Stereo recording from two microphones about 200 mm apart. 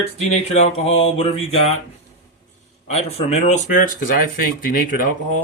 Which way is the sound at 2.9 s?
30° left (ahead or behind).